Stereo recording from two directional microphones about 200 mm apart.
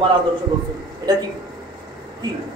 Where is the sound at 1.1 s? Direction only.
20° right (ahead or behind).